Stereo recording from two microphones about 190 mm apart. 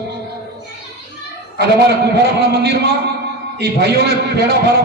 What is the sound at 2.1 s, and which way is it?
Speech, 60° right (ahead or behind).